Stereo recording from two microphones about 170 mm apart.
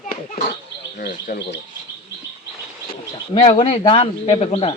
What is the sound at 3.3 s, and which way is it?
Speech, 35° left (ahead or behind).